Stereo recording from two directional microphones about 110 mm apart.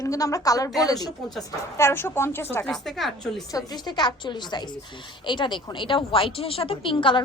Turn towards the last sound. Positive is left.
turn(degrees=50)  # may be behind; listen again after turning